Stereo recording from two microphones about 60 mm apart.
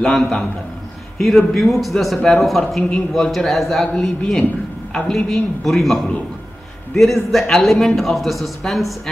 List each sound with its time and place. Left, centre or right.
0.0 s a man's voice: centre